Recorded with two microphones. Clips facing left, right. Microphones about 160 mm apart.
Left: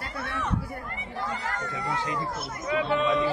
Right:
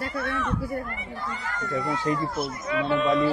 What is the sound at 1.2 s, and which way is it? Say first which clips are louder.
Speech: left 2 dB; 90° left.